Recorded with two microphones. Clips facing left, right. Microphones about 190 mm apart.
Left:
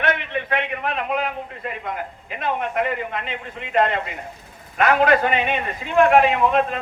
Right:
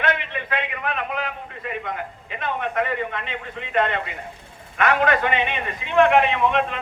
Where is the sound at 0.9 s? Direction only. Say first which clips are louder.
Left 4 dB; 35° left (ahead or behind).